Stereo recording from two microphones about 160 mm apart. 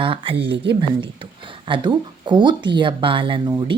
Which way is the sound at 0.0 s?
30° right (ahead or behind).